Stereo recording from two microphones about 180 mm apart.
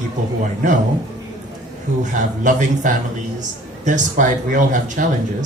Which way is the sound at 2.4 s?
45° right (ahead or behind).